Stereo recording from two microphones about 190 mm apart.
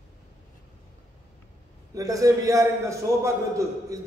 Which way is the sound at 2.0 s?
15° right (ahead or behind).